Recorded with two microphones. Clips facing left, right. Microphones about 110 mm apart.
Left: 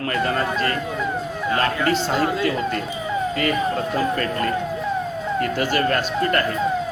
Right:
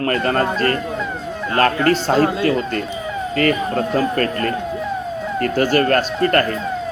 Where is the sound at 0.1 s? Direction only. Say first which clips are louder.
Right 2 dB; 50° right (ahead or behind).